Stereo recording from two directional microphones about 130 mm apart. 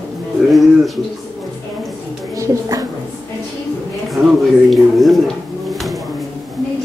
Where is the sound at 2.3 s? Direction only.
25° right (ahead or behind).